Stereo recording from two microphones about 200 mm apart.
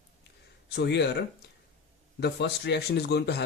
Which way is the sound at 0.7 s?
55° left (ahead or behind).